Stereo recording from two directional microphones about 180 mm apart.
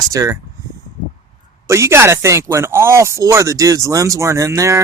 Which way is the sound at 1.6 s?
15° right (ahead or behind).